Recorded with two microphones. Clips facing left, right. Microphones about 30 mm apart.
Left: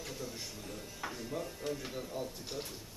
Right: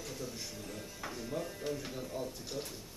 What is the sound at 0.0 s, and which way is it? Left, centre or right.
Speech, centre.